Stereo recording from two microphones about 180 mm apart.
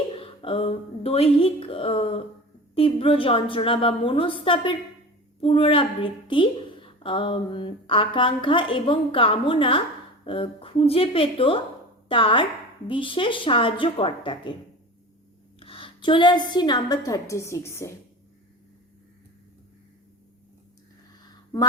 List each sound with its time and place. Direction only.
0.2 s a woman's voice: 30° left (ahead or behind)
15.6 s a woman's voice: 30° left (ahead or behind)